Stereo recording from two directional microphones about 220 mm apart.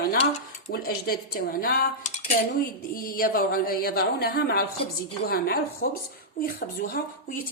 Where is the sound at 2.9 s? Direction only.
40° left (ahead or behind).